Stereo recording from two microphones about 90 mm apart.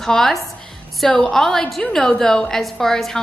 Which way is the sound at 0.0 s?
5° left (ahead or behind).